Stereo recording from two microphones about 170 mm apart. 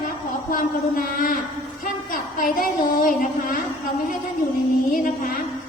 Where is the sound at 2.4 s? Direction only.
55° left (ahead or behind).